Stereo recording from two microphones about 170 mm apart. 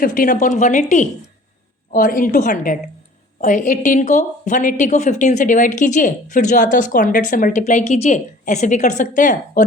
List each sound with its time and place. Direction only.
0.0 s a woman's voice: 55° left (ahead or behind)